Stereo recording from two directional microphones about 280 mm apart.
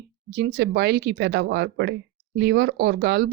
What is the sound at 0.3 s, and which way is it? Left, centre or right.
Speech, right.